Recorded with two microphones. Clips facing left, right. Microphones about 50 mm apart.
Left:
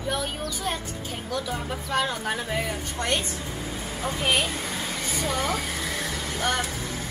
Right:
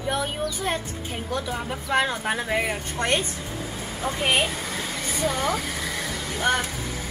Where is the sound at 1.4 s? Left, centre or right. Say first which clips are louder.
Right 2 dB; centre.